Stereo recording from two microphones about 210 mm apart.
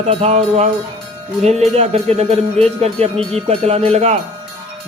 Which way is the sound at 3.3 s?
30° right (ahead or behind).